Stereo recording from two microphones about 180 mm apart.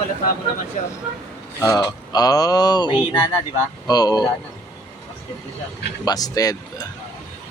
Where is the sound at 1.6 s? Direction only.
15° left (ahead or behind).